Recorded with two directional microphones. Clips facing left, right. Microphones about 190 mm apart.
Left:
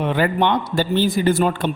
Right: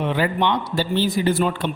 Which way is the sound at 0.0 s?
50° left (ahead or behind).